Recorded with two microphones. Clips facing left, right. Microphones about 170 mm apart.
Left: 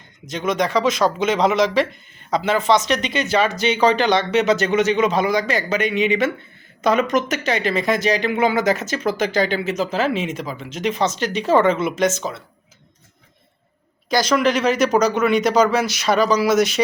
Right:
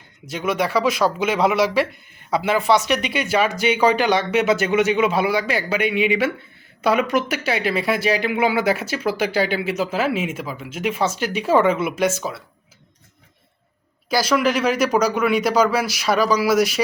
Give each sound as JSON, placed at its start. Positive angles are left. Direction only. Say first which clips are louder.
{"t": 0.3, "sound": "speech", "louder": "left 1 dB", "side_deg": -10}
{"t": 14.1, "sound": "speech", "louder": "left 1 dB", "side_deg": -5}